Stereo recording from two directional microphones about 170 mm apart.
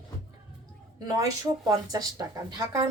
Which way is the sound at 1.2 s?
20° right (ahead or behind).